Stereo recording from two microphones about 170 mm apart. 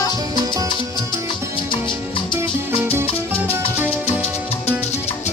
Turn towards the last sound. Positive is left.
turn(degrees=-10)  # may be behind; listen again after turning